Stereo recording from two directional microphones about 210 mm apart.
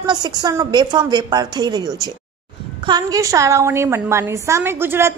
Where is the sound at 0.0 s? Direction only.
20° right (ahead or behind).